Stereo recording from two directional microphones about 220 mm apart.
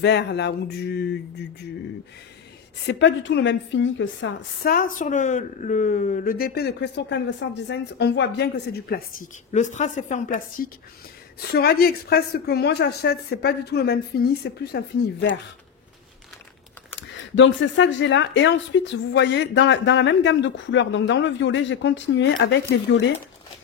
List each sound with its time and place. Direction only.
0.0 s a woman's voice: 50° left (ahead or behind)
2.9 s speech: 50° left (ahead or behind)
4.6 s a woman's voice: 40° left (ahead or behind)
17.4 s speech: 55° left (ahead or behind)